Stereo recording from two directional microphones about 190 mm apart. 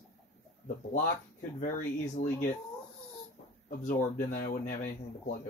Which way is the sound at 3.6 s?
45° left (ahead or behind).